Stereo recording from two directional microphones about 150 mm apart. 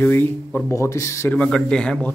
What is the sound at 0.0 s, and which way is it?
Speech, 10° left (ahead or behind).